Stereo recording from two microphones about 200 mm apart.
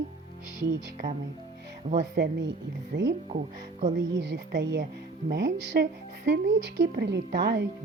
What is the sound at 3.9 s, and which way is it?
Speech, 60° right (ahead or behind).